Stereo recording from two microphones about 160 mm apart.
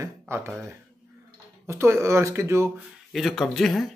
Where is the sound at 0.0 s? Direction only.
15° right (ahead or behind).